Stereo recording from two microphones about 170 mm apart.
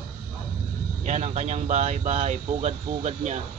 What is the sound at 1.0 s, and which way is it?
Speech, 40° right (ahead or behind).